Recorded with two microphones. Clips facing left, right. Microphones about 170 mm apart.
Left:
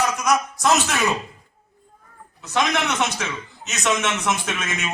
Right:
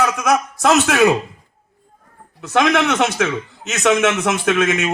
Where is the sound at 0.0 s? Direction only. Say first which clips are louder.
Right 4 dB; 55° right (ahead or behind).